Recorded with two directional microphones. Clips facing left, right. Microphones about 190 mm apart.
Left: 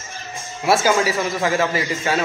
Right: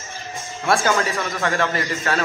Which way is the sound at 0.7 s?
5° left (ahead or behind).